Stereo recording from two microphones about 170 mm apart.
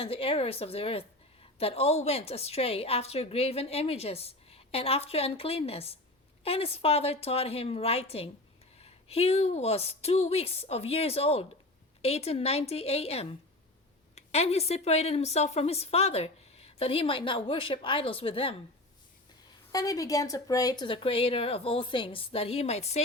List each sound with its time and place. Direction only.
0.0 s a woman's voice: 35° left (ahead or behind)
19.7 s a woman's voice: 20° left (ahead or behind); by 23.0 s 40° left (ahead or behind)